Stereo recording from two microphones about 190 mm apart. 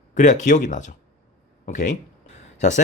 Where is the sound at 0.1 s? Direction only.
40° left (ahead or behind).